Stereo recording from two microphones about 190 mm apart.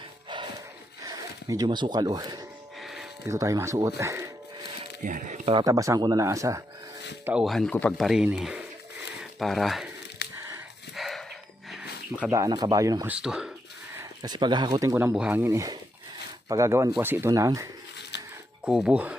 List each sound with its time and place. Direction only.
1.0 s speech: 20° right (ahead or behind)
2.8 s a sound: centre (ahead or behind)
3.2 s speech: 15° right (ahead or behind)
5.0 s speech: 40° right (ahead or behind)
5.5 s speech: 20° right (ahead or behind)
7.3 s speech: 5° right (ahead or behind)
10.2 s a sound: 60° left (ahead or behind)
10.9 s dog: centre (ahead or behind)
11.7 s a sound: 5° right (ahead or behind)
12.3 s speech: 20° right (ahead or behind)
13.1 s speech: 5° right (ahead or behind)
14.0 s speech: 20° right (ahead or behind)
18.1 s a sound: 65° left (ahead or behind)
18.6 s speech: 5° right (ahead or behind)